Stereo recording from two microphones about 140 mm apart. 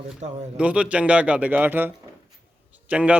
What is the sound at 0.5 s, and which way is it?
A man's voice, 10° right (ahead or behind).